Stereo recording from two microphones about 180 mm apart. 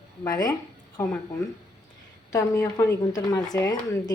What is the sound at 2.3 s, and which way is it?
A woman's voice, 20° left (ahead or behind).